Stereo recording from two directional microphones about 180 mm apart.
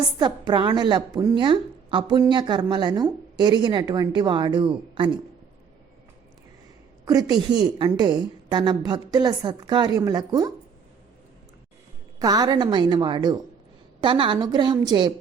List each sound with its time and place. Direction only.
0.2 s a woman's voice: 25° right (ahead or behind)
7.0 s a woman's voice: 20° right (ahead or behind)
12.2 s a woman's voice: 20° right (ahead or behind)